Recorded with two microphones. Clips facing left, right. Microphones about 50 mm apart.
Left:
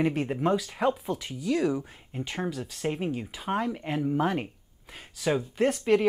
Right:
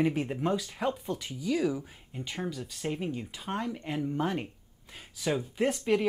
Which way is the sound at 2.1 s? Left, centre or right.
Left.